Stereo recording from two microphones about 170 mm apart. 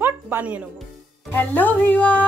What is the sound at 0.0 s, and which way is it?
Music, 10° right (ahead or behind).